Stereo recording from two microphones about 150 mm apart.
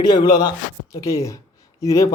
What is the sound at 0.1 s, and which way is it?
Speech, 30° left (ahead or behind).